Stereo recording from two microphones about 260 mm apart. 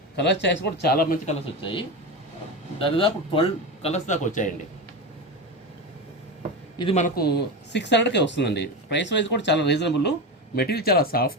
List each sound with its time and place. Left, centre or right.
0.2 s speech: left
2.7 s a man's voice: centre
6.7 s speech: left